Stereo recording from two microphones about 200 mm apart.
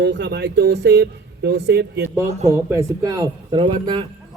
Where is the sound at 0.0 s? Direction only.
60° right (ahead or behind).